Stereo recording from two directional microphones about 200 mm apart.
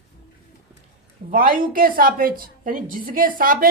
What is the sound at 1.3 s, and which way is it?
A woman's voice, 45° right (ahead or behind).